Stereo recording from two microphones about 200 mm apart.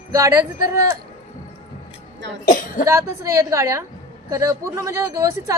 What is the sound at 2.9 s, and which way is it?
Speech, 15° right (ahead or behind).